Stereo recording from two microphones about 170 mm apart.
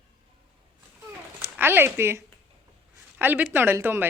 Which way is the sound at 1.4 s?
10° right (ahead or behind).